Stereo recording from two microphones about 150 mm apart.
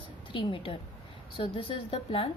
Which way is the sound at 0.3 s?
35° left (ahead or behind).